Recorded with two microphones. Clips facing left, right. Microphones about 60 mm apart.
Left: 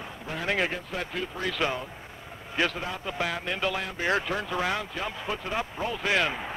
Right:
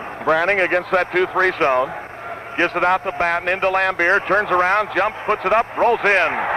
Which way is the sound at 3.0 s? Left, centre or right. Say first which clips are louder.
Right 11 dB; right.